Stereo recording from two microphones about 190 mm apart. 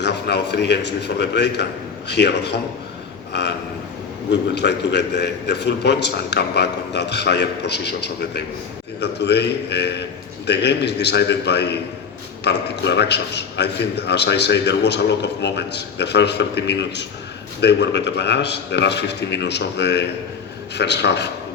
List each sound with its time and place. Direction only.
0.0 s a man's voice: 65° left (ahead or behind)